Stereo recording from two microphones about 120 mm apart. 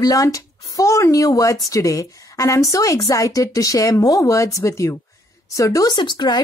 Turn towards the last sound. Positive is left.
turn(degrees=40)  # may be behind; listen again after turning